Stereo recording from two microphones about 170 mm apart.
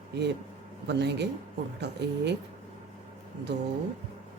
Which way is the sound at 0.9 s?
90° right.